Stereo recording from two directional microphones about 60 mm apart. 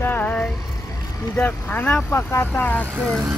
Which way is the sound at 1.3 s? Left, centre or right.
Left.